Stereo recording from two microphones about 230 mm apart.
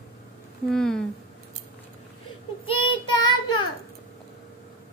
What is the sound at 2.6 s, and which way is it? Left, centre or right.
Child singing, left.